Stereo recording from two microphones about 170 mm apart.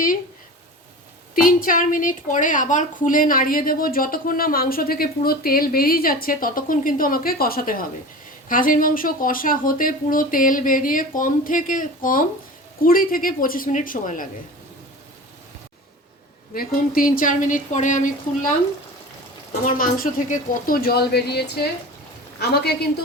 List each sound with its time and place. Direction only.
1.4 s a woman's voice: 55° left (ahead or behind)
16.6 s speech: 55° left (ahead or behind)
19.6 s speech: 50° left (ahead or behind); by 22.9 s 70° left (ahead or behind)